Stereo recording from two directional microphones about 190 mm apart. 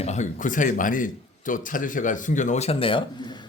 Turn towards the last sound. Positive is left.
turn(degrees=25)  # may be behind; listen again after turning